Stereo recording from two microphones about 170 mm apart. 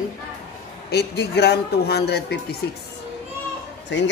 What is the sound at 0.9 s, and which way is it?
Speech, 75° left (ahead or behind).